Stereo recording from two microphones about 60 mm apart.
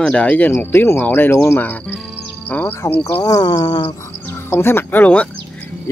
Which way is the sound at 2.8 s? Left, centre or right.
Left.